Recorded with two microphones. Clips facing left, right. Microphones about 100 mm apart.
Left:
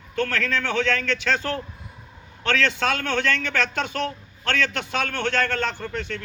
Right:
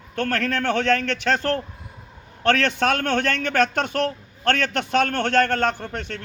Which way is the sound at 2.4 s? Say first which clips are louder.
Right 3 dB; 50° right (ahead or behind).